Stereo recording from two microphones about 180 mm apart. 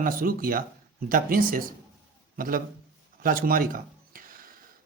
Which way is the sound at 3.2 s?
55° right (ahead or behind).